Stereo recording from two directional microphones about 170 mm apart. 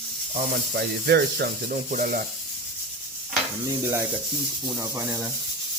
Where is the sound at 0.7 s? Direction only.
75° right (ahead or behind).